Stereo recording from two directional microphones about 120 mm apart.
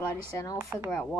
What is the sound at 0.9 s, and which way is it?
Speech, 10° left (ahead or behind).